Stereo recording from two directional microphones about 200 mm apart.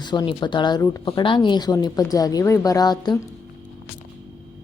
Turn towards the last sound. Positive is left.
turn(degrees=20)  # may be behind; listen again after turning